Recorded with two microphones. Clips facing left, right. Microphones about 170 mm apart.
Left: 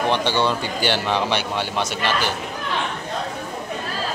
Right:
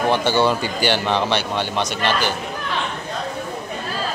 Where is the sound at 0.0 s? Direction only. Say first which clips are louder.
Right 3 dB; 5° right (ahead or behind).